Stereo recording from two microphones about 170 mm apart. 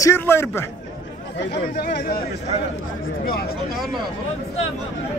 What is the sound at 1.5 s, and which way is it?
Speech, 75° left (ahead or behind).